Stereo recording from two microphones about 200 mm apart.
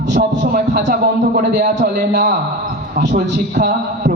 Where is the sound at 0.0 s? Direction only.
55° right (ahead or behind).